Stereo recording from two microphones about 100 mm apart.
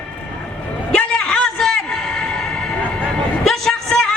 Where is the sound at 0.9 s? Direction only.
10° left (ahead or behind).